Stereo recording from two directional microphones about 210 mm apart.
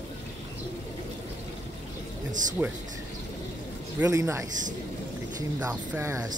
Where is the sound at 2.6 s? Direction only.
10° right (ahead or behind).